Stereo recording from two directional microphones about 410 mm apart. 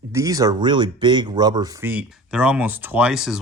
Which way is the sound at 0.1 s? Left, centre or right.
Centre.